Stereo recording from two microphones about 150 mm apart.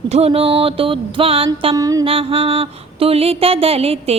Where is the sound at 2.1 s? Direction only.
40° right (ahead or behind).